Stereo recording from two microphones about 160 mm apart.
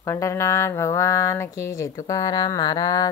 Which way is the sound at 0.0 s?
20° left (ahead or behind).